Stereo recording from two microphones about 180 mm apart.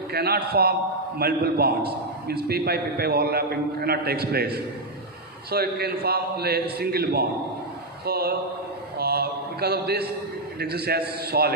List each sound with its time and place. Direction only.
0.1 s a man's voice: 60° right (ahead or behind)
9.0 s a sound: 60° right (ahead or behind)
10.6 s a man's voice: 60° right (ahead or behind)